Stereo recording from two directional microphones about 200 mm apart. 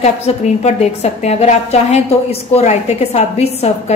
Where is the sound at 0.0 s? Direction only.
35° left (ahead or behind).